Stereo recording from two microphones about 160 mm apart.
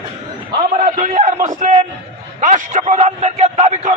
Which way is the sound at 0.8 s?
50° right (ahead or behind).